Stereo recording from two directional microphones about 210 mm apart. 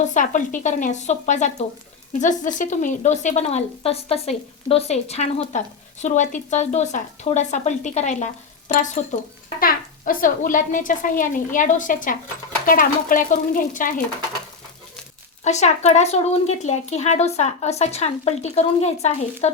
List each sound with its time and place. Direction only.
0.0 s speech: 35° left (ahead or behind)
15.4 s speech: 35° left (ahead or behind)